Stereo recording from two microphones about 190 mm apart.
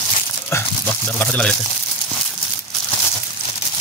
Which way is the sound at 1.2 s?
5° left (ahead or behind).